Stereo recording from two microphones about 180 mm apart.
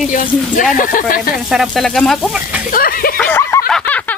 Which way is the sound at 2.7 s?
55° left (ahead or behind).